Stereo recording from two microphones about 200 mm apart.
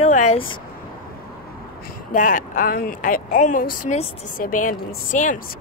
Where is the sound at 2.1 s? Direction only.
40° left (ahead or behind).